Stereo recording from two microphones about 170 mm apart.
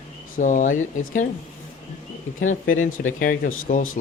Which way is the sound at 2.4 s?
50° left (ahead or behind).